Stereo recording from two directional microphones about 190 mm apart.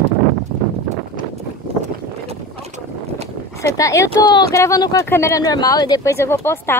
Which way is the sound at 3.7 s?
15° left (ahead or behind).